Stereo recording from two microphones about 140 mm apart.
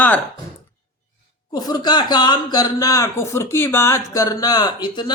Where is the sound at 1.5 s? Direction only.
30° left (ahead or behind).